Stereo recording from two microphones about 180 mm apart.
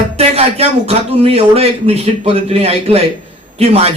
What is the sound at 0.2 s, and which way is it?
A man's voice, 35° right (ahead or behind).